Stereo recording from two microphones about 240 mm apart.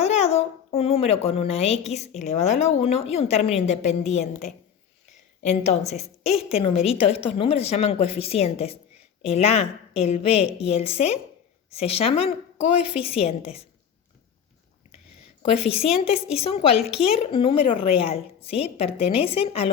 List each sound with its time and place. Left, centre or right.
0.0 s a sound: left
1.3 s a woman's voice: left
5.5 s a woman's voice: left
15.5 s a woman's voice: left